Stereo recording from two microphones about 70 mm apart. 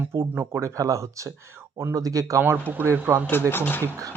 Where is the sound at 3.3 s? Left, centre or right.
Left.